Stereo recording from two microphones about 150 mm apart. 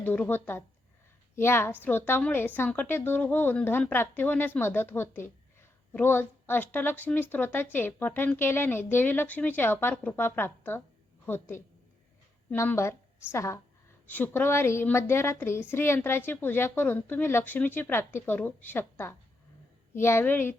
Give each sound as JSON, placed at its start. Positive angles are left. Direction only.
{"t": 0.0, "sound": "a woman's voice", "side_deg": 10}